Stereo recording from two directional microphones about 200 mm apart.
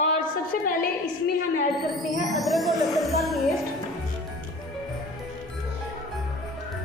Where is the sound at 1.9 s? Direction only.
Centre (ahead or behind).